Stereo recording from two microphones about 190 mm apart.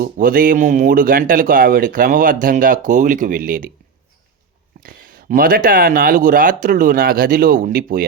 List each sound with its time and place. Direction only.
0.0 s speech: 45° right (ahead or behind)
4.8 s speech: 50° right (ahead or behind)